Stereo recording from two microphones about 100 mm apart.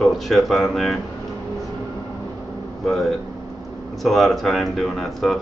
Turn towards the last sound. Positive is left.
turn(degrees=0)  # may be behind; listen again after turning